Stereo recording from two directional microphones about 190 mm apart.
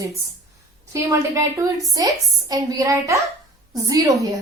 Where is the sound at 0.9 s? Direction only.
15° right (ahead or behind).